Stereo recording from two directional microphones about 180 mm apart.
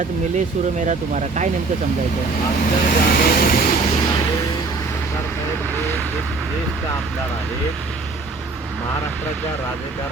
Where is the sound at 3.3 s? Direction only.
55° left (ahead or behind).